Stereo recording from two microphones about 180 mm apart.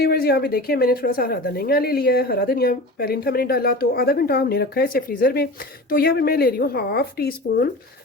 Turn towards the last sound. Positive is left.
turn(degrees=60)  # may be behind; listen again after turning